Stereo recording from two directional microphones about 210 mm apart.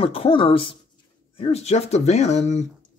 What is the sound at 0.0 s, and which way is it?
Speech, 25° left (ahead or behind).